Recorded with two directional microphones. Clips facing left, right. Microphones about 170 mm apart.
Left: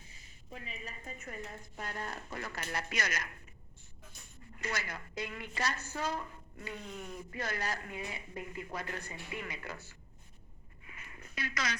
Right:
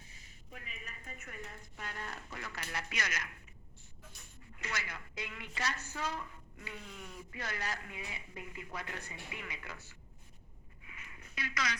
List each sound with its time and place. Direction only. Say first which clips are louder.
0.5 s a woman's voice: left 5 dB; 30° left (ahead or behind)
4.5 s a woman's voice: left 4 dB; 40° left (ahead or behind)
10.8 s a sound: left 3 dB; 45° left (ahead or behind)